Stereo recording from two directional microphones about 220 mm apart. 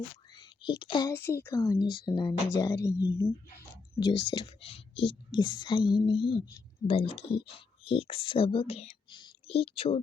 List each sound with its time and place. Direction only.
0.3 s a woman's voice: 20° left (ahead or behind)